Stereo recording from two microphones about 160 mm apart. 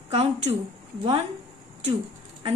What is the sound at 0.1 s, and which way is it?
Speech, 40° right (ahead or behind).